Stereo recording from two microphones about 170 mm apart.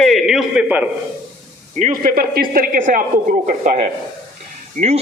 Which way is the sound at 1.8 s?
50° right (ahead or behind).